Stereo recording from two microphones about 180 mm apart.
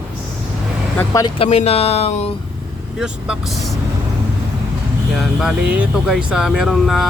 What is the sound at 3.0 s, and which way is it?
Speech, 5° right (ahead or behind).